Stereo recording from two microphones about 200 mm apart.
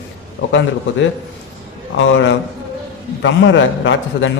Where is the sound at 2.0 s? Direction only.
70° left (ahead or behind).